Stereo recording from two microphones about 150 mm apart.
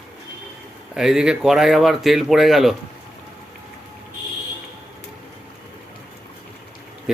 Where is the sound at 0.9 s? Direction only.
5° right (ahead or behind).